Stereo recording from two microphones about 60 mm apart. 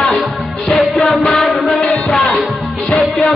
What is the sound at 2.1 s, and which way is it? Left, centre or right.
Music, left.